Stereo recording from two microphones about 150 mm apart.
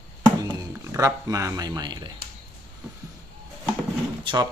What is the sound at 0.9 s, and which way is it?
Speech, 20° right (ahead or behind).